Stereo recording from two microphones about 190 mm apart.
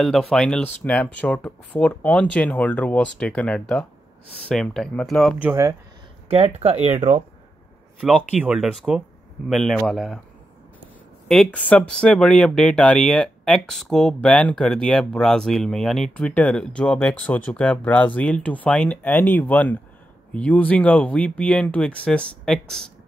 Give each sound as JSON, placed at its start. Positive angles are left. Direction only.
{"t": 0.0, "sound": "speech", "side_deg": 0}
{"t": 5.4, "sound": "speech", "side_deg": -15}
{"t": 6.3, "sound": "speech", "side_deg": -30}
{"t": 8.0, "sound": "speech", "side_deg": -5}
{"t": 11.2, "sound": "speech", "side_deg": 5}